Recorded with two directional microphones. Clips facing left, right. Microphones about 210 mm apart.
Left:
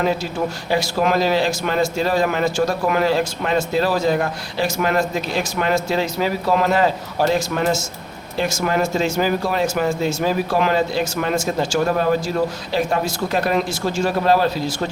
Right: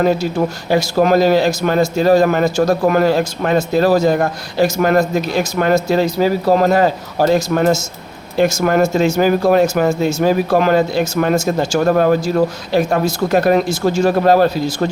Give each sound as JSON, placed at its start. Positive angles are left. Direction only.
{"t": 0.7, "sound": "a man's voice", "side_deg": -40}